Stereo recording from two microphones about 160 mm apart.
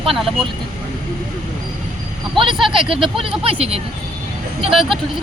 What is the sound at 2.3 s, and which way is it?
Speech, 30° right (ahead or behind).